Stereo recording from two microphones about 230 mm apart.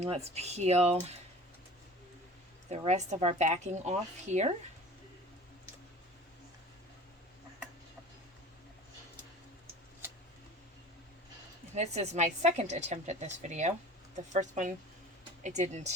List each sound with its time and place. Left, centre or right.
0.0 s a woman's voice: right
2.6 s a woman's voice: right
11.7 s a woman's voice: right